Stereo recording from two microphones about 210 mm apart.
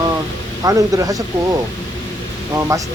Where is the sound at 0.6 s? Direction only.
15° right (ahead or behind).